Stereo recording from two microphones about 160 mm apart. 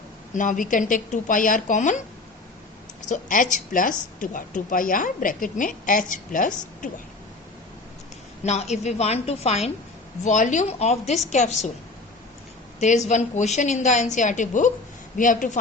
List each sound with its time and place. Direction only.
0.3 s a woman's voice: 55° left (ahead or behind)
3.1 s a woman's voice: 55° left (ahead or behind)
8.4 s a woman's voice: 45° left (ahead or behind)
12.8 s a woman's voice: 50° left (ahead or behind)